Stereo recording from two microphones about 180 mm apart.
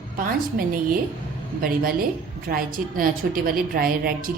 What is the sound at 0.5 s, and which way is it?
A woman's voice, 50° right (ahead or behind).